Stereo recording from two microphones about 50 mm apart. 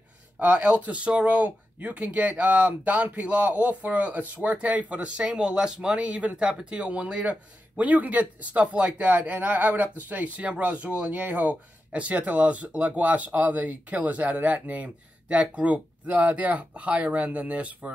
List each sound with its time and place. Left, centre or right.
0.4 s speech: right